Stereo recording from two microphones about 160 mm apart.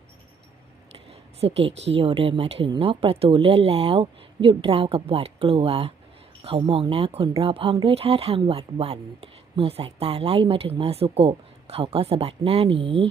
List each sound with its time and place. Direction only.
0.9 s a sound: 40° right (ahead or behind)
1.7 s speech: 90° right
2.0 s speech: 35° right (ahead or behind)